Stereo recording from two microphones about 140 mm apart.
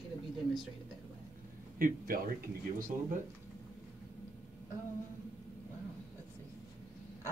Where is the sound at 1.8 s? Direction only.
85° right.